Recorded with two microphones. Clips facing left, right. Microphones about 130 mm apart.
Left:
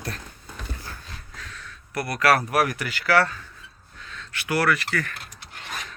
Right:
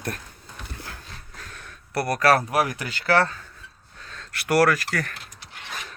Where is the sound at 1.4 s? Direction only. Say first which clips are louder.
Left 1 dB; 50° right (ahead or behind).